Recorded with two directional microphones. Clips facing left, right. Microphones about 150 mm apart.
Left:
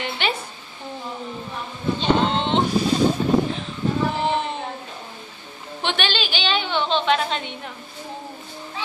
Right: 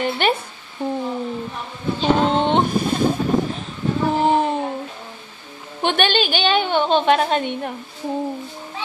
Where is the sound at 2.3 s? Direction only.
50° right (ahead or behind).